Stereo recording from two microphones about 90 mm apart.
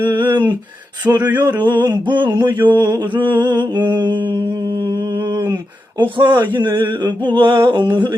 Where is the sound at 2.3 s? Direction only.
45° right (ahead or behind); by 4.3 s 60° right (ahead or behind).